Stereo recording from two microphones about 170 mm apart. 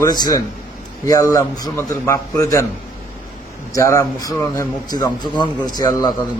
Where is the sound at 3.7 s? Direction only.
15° left (ahead or behind).